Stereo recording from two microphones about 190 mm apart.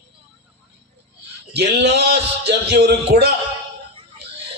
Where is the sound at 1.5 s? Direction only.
60° right (ahead or behind).